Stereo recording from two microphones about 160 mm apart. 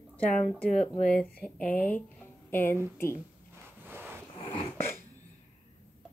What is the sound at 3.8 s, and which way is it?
Rub, 15° right (ahead or behind).